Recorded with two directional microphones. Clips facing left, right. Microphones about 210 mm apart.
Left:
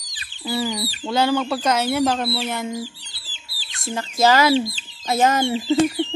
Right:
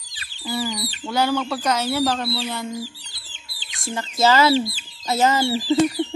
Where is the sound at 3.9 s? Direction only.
15° left (ahead or behind).